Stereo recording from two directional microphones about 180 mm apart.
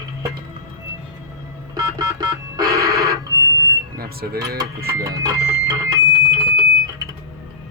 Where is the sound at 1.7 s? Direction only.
20° right (ahead or behind).